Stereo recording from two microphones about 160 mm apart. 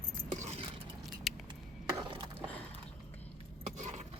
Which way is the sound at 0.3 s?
45° right (ahead or behind).